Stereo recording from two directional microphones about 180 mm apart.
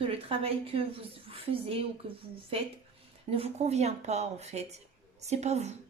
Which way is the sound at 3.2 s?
35° right (ahead or behind).